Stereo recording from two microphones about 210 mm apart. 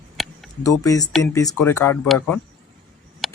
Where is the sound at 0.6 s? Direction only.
15° left (ahead or behind).